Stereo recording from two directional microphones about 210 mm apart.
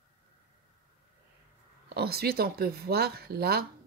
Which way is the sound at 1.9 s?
50° right (ahead or behind).